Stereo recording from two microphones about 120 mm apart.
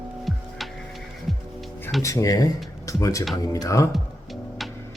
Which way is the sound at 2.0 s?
25° left (ahead or behind).